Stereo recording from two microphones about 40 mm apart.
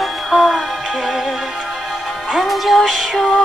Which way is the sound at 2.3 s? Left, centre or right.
Centre.